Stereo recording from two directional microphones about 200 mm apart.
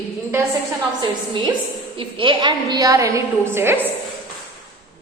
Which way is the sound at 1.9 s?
25° right (ahead or behind).